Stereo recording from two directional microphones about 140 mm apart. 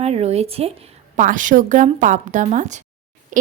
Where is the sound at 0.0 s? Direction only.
50° right (ahead or behind).